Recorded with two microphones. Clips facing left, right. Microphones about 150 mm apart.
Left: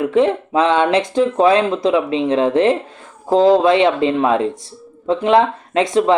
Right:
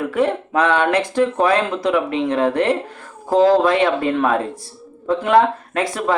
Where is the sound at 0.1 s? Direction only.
20° left (ahead or behind).